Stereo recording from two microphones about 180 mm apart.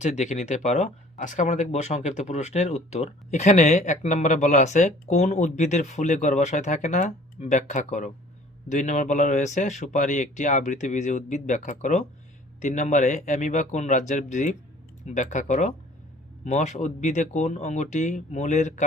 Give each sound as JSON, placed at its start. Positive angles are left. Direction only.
{"t": 0.0, "sound": "speech", "side_deg": 40}